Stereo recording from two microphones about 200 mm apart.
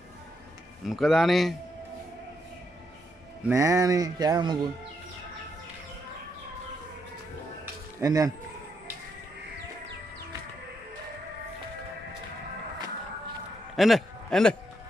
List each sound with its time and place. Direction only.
0.8 s speech: centre (ahead or behind)
3.4 s a sound: 15° right (ahead or behind)
8.0 s speech: 15° right (ahead or behind)
13.7 s a man's voice: centre (ahead or behind)